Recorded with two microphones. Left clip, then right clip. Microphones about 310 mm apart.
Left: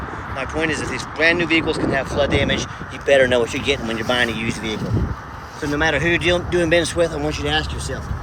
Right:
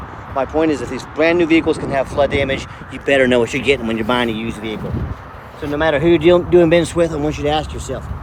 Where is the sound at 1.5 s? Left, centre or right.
Centre.